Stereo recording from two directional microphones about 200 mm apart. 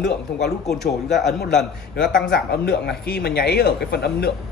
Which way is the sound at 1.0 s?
60° left (ahead or behind).